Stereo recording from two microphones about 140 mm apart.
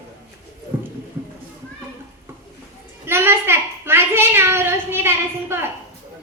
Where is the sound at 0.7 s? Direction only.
15° right (ahead or behind).